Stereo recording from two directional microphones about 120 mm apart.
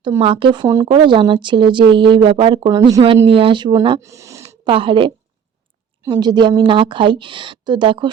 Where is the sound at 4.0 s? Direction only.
25° right (ahead or behind).